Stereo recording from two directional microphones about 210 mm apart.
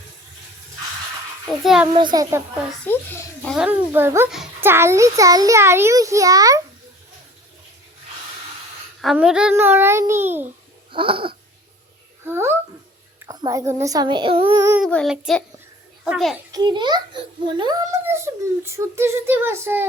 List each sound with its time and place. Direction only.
1.6 s child singing: centre (ahead or behind)
1.9 s a child's voice: 20° right (ahead or behind)
2.8 s a child's voice: 10° left (ahead or behind)
3.5 s a child's voice: 5° right (ahead or behind)
9.0 s a child's voice: centre (ahead or behind)
10.9 s a child's voice: 25° right (ahead or behind)
12.3 s a child's voice: 10° right (ahead or behind)
14.8 s child singing: centre (ahead or behind)
16.5 s a child's voice: 20° right (ahead or behind)